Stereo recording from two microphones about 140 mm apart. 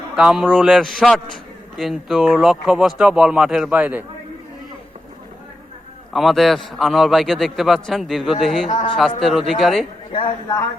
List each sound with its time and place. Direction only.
0.2 s a man's voice: 5° right (ahead or behind)
6.1 s a man's voice: centre (ahead or behind)
10.1 s speech: 35° left (ahead or behind)